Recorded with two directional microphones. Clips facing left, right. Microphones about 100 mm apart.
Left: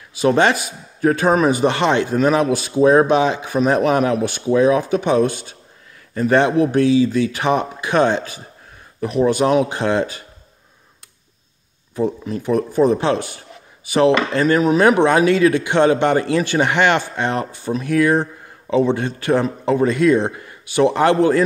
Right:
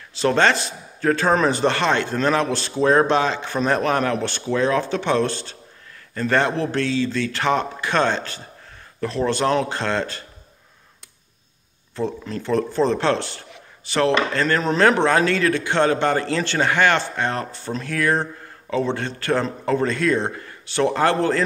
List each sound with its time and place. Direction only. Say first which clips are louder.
0.2 s speech: left 3 dB; 15° left (ahead or behind)
11.9 s speech: left 5 dB; 15° left (ahead or behind)